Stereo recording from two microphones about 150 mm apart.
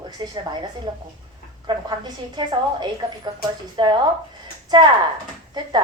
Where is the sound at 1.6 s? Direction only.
30° right (ahead or behind).